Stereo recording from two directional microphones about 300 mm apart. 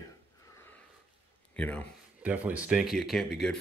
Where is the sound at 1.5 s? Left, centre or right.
Centre.